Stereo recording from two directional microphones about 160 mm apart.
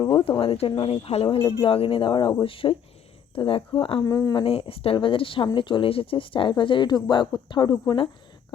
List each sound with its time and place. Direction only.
0.0 s speech: 30° left (ahead or behind)
4.0 s speech: 20° left (ahead or behind)
4.4 s speech: 35° left (ahead or behind)